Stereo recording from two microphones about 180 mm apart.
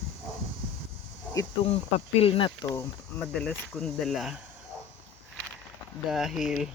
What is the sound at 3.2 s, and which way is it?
Speech, 5° left (ahead or behind).